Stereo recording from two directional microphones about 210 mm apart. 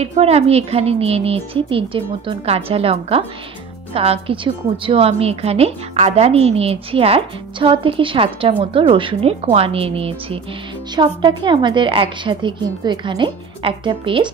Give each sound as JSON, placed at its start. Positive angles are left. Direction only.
{"t": 0.0, "sound": "a woman's voice", "side_deg": -30}